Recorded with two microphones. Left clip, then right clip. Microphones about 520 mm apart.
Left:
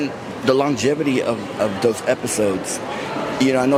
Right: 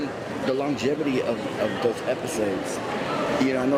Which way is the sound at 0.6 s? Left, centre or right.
Left.